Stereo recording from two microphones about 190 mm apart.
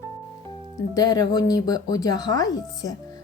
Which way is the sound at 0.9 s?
20° left (ahead or behind).